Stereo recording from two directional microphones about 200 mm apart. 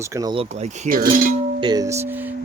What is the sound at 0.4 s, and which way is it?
Speech, 35° right (ahead or behind).